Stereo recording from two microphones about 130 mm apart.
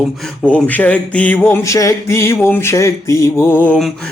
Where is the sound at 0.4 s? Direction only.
10° left (ahead or behind).